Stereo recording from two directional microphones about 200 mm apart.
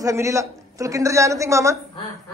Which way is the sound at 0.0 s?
15° right (ahead or behind).